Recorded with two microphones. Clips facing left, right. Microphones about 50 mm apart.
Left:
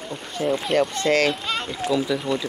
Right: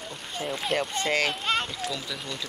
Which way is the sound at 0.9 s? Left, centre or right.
Centre.